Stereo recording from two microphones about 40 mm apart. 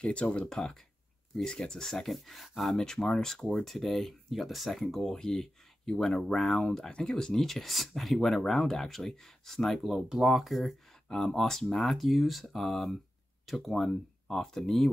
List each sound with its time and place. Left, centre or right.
0.0 s speech: left
0.5 s speech: centre
2.8 s speech: centre
5.0 s speech: centre
11.1 s speech: centre